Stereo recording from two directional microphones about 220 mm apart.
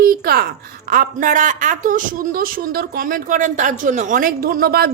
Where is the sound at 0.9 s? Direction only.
40° right (ahead or behind).